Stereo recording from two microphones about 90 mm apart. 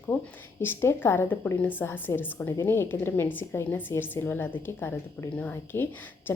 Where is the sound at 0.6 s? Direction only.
25° left (ahead or behind).